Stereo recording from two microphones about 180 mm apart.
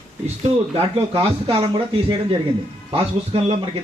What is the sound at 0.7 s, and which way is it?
Speech, 30° right (ahead or behind).